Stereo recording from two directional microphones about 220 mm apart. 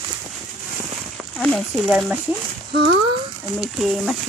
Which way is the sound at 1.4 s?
Centre (ahead or behind).